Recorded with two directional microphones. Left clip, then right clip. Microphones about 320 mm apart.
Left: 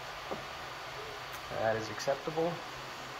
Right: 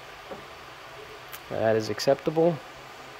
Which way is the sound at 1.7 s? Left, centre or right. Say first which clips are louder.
Right 10 dB; right.